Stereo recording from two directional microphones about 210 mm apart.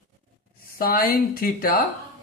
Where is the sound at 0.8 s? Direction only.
45° left (ahead or behind).